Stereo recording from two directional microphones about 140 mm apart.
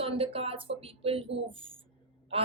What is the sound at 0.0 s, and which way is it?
A woman's voice, 45° right (ahead or behind).